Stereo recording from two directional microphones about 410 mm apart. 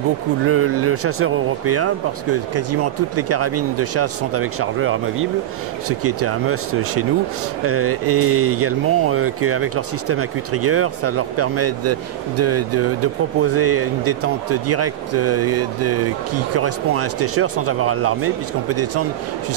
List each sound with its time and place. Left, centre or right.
0.5 s speech: right